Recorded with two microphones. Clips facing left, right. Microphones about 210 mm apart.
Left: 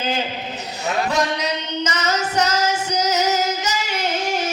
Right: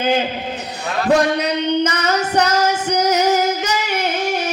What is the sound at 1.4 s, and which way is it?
Female singing, 60° right (ahead or behind).